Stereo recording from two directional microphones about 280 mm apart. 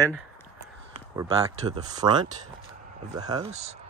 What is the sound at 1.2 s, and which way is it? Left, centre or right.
Speech, centre.